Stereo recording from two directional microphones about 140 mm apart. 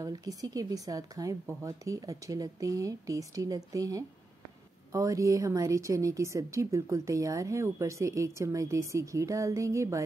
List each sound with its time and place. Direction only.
0.0 s a woman's voice: 25° right (ahead or behind)